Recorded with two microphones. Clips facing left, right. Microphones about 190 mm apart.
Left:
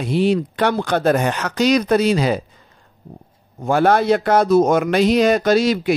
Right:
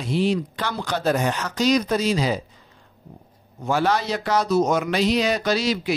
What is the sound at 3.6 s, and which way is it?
A man's voice, 55° left (ahead or behind).